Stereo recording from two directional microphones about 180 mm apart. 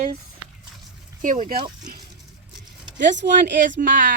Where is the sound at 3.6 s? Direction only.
45° right (ahead or behind).